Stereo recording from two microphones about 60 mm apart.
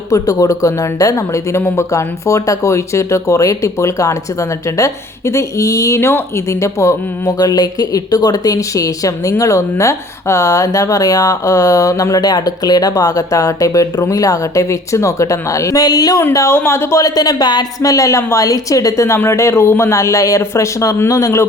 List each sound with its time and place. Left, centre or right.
0.1 s speech: left
1.6 s speech: left
1.9 s speech: left
6.0 s speech: left
9.4 s speech: left
16.5 s speech: left
17.0 s speech: left
19.0 s speech: left
20.4 s speech: left